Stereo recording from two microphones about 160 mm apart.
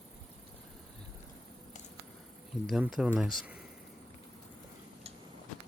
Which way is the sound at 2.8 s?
5° right (ahead or behind).